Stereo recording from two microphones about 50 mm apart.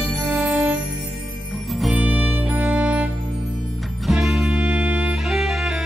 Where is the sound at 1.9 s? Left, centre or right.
Right.